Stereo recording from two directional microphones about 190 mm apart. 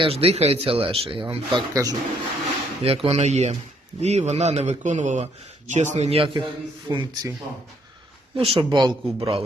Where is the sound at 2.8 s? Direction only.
30° right (ahead or behind).